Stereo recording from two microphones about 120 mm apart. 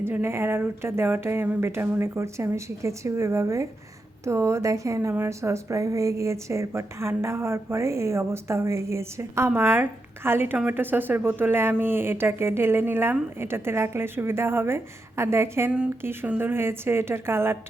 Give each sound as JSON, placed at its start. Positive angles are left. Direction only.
{"t": 0.0, "sound": "a woman's voice", "side_deg": -20}